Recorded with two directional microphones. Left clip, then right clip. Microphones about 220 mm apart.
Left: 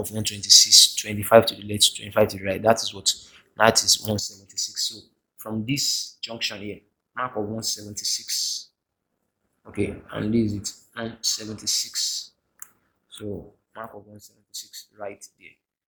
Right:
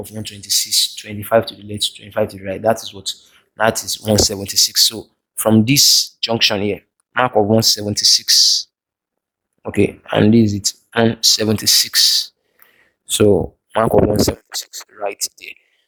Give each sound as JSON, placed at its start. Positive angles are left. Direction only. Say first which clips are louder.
{"t": 0.0, "sound": "speech", "louder": "left 1 dB", "side_deg": -5}
{"t": 4.1, "sound": "speech", "louder": "right 14 dB", "side_deg": -35}
{"t": 9.7, "sound": "speech", "louder": "right 13 dB", "side_deg": -45}
{"t": 14.9, "sound": "speech", "louder": "right 14 dB", "side_deg": -45}